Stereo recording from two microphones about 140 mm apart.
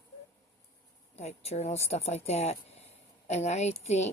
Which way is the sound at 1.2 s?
50° left (ahead or behind).